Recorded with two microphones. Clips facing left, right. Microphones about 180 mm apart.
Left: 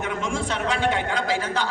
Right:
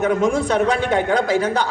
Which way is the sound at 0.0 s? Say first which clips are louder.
Right 9 dB; 40° right (ahead or behind).